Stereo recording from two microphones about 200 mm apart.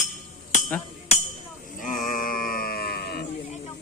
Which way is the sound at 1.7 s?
40° left (ahead or behind).